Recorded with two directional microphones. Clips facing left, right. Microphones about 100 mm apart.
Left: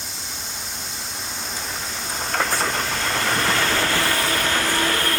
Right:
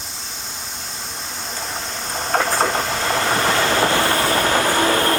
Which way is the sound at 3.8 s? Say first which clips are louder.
Right 5 dB; 25° right (ahead or behind).